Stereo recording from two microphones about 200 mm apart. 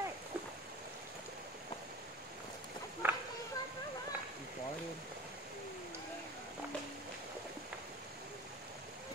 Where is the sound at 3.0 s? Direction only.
10° right (ahead or behind).